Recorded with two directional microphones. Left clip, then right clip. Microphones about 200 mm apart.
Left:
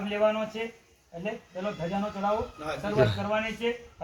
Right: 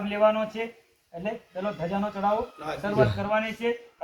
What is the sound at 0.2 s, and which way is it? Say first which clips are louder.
Speech: right 4 dB; 15° left (ahead or behind).